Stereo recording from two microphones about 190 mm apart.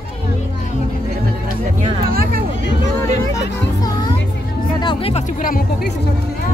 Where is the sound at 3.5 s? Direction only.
20° left (ahead or behind); by 5.9 s 45° left (ahead or behind).